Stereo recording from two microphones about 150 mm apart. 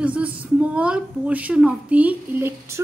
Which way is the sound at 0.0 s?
10° right (ahead or behind).